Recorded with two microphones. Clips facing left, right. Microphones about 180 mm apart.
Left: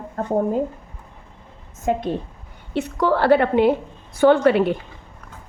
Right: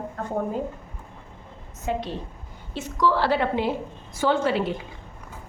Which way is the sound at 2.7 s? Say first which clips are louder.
Left 3 dB; 60° left (ahead or behind).